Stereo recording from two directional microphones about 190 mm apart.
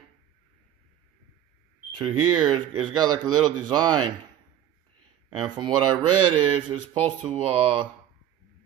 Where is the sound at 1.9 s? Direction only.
25° right (ahead or behind).